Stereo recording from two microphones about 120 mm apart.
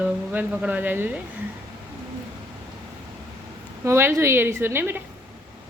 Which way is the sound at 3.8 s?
20° right (ahead or behind).